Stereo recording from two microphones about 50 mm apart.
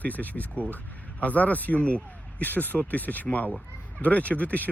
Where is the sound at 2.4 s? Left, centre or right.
Left.